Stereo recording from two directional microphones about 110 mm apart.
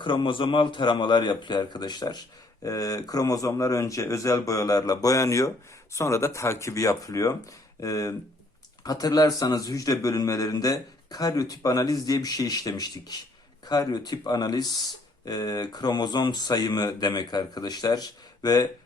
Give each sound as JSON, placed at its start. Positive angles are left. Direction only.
{"t": 0.0, "sound": "a man's voice", "side_deg": 50}